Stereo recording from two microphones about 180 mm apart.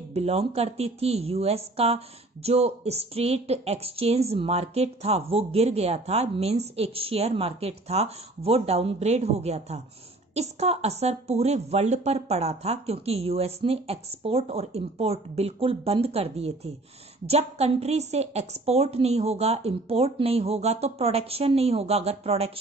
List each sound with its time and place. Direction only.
0.1 s speech: 35° right (ahead or behind)